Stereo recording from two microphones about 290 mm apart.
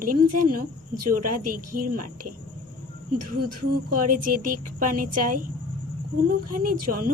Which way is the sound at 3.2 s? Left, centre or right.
Right.